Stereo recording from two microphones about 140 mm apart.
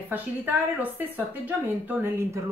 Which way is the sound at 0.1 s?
15° right (ahead or behind).